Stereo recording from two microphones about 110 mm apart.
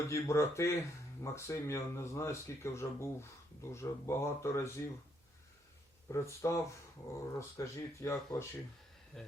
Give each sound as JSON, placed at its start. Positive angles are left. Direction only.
{"t": 0.0, "sound": "speech", "side_deg": 30}
{"t": 6.1, "sound": "speech", "side_deg": 25}
{"t": 9.1, "sound": "speech", "side_deg": 0}